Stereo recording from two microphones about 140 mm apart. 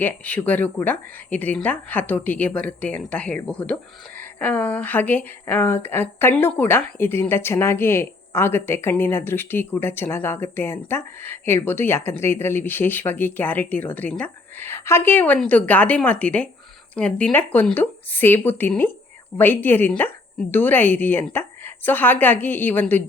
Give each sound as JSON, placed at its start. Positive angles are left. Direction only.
{"t": 0.0, "sound": "speech", "side_deg": 10}